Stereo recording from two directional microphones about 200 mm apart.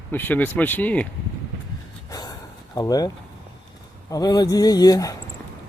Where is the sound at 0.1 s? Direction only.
10° left (ahead or behind).